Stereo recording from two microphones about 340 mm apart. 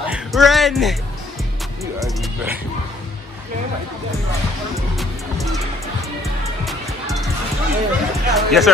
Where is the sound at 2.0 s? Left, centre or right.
Centre.